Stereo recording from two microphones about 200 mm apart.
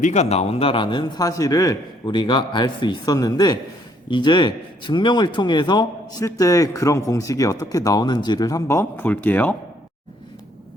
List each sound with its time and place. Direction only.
0.0 s a man's voice: 35° left (ahead or behind); by 9.6 s 10° left (ahead or behind)